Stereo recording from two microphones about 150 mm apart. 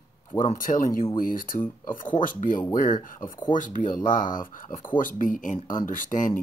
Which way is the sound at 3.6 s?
60° left (ahead or behind).